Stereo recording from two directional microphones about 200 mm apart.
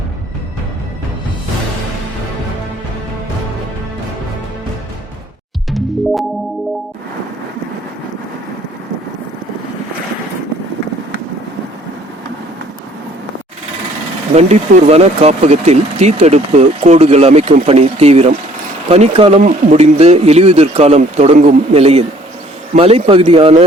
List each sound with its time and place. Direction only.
5.7 s music: centre (ahead or behind)
14.3 s a man's voice: 35° right (ahead or behind)